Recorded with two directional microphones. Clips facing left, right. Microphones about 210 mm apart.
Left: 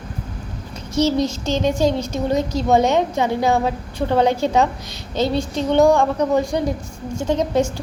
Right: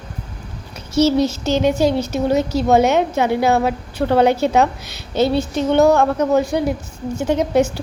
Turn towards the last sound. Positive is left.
turn(degrees=-10)  # may be behind; listen again after turning